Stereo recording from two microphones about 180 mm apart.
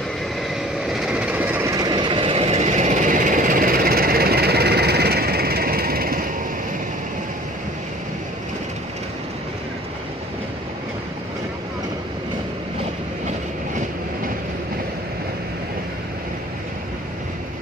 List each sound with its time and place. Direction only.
0.9 s train: 5° right (ahead or behind); by 6.2 s 55° right (ahead or behind)